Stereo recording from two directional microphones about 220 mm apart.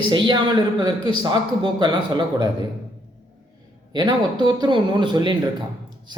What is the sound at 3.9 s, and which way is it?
Speech, 20° right (ahead or behind).